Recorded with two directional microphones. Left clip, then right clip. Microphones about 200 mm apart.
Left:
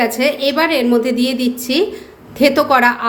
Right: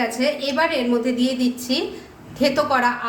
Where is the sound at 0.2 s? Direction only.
45° left (ahead or behind).